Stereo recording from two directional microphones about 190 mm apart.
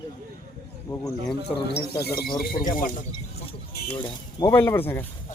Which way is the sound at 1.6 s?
55° left (ahead or behind).